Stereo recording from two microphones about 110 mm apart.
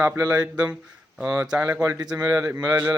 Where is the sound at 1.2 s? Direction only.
10° right (ahead or behind); by 2.6 s 25° right (ahead or behind).